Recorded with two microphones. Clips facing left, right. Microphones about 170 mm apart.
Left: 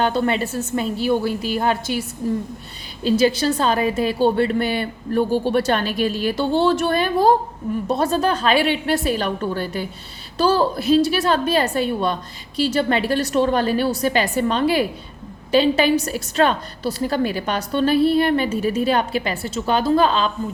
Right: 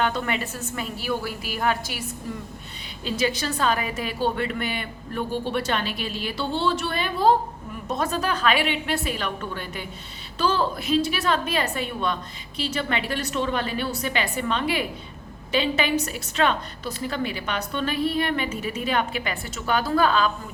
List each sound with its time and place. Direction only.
0.0 s a woman's voice: 35° left (ahead or behind)